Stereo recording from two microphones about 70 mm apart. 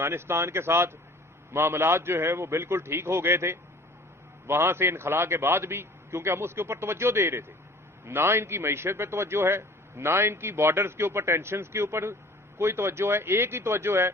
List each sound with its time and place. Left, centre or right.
0.0 s a man's voice: right